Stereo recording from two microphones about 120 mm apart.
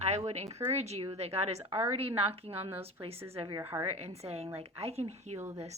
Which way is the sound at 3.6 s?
25° right (ahead or behind).